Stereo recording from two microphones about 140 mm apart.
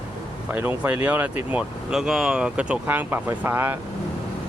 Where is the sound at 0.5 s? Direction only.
10° right (ahead or behind).